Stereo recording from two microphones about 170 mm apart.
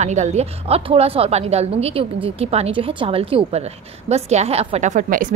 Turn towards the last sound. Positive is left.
turn(degrees=-50)  # may be behind; listen again after turning